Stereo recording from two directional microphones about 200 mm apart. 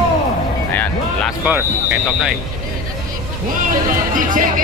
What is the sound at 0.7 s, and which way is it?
Music, 10° left (ahead or behind).